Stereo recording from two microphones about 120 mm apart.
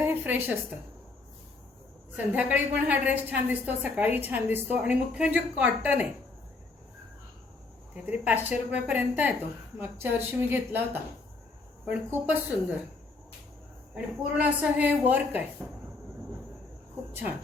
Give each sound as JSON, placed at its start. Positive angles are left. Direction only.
{"t": 0.0, "sound": "a woman's voice", "side_deg": -15}
{"t": 2.1, "sound": "a woman's voice", "side_deg": -10}
{"t": 8.0, "sound": "a woman's voice", "side_deg": -15}
{"t": 11.9, "sound": "a woman's voice", "side_deg": -15}
{"t": 13.9, "sound": "a woman's voice", "side_deg": -10}
{"t": 17.1, "sound": "speech", "side_deg": -15}